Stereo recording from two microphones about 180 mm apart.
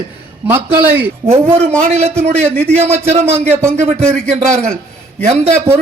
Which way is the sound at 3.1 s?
15° right (ahead or behind).